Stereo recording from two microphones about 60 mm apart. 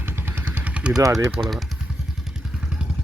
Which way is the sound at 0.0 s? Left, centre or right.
Right.